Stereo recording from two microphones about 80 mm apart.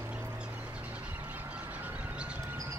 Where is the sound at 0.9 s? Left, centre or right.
Centre.